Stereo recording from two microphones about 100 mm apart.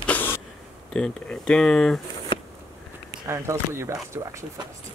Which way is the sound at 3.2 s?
25° right (ahead or behind).